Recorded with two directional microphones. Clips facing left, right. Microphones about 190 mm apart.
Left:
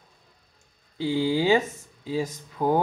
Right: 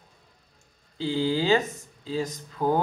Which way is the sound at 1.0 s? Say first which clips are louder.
Left 2 dB; 10° left (ahead or behind).